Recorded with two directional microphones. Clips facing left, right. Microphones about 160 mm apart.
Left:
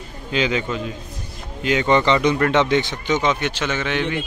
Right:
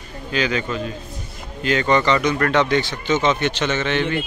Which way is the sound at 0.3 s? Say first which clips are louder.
Left 1 dB; 20° left (ahead or behind).